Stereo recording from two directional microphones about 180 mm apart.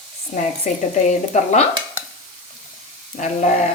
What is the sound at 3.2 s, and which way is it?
Sizzle, 40° left (ahead or behind).